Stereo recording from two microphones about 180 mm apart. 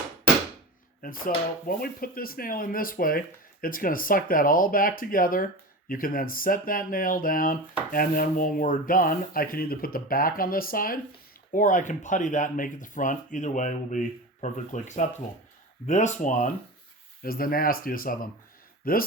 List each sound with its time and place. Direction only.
1.0 s speech: 50° left (ahead or behind)
17.2 s speech: 55° left (ahead or behind)